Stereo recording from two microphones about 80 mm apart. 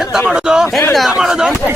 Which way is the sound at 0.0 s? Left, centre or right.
Centre.